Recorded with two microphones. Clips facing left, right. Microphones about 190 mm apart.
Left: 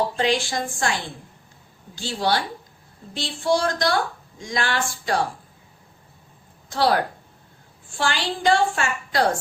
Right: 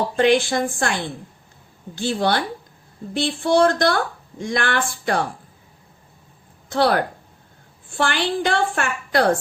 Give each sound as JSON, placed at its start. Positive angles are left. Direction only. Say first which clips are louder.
{"t": 0.2, "sound": "a woman's voice", "louder": "right 6 dB", "side_deg": -60}
{"t": 2.0, "sound": "a woman's voice", "louder": "right 3 dB", "side_deg": -55}
{"t": 6.7, "sound": "a woman's voice", "louder": "right 2 dB", "side_deg": -60}